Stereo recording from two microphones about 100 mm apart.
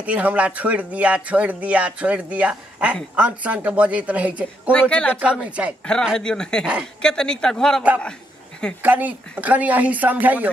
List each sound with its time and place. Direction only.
0.0 s speech: 15° right (ahead or behind)
4.7 s speech: 10° left (ahead or behind)
5.2 s speech: 10° right (ahead or behind)
6.1 s speech: 5° left (ahead or behind)
6.6 s speech: 5° right (ahead or behind)
7.0 s speech: 5° left (ahead or behind)
8.8 s speech: 15° right (ahead or behind)